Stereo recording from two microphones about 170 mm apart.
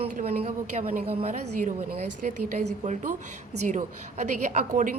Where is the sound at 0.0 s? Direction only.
35° right (ahead or behind).